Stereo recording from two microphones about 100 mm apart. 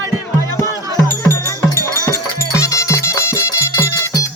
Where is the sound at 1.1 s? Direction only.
25° left (ahead or behind).